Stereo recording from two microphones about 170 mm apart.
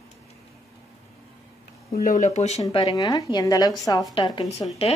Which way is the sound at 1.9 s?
45° left (ahead or behind).